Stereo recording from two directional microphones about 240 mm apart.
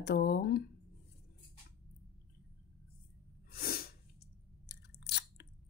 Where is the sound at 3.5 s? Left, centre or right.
Left.